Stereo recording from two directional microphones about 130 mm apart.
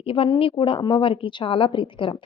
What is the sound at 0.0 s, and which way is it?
Speech, 45° left (ahead or behind).